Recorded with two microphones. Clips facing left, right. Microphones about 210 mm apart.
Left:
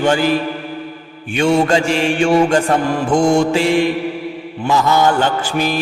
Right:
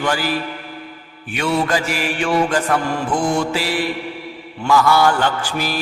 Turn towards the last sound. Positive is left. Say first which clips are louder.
# left 4 dB
turn(degrees=20)  # may be behind; listen again after turning